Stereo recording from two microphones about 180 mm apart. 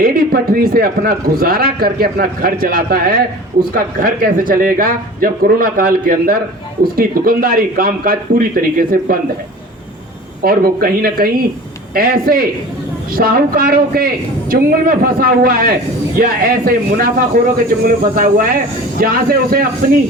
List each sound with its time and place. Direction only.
0.0 s speech: 55° right (ahead or behind)
10.4 s speech: 55° right (ahead or behind)